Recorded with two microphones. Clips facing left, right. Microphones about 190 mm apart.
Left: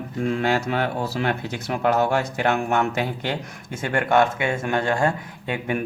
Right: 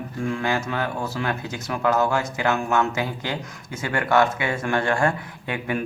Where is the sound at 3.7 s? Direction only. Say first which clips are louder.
Left 1 dB; 50° left (ahead or behind).